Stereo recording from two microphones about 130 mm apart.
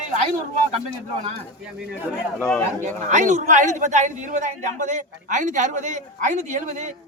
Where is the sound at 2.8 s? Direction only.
70° right (ahead or behind).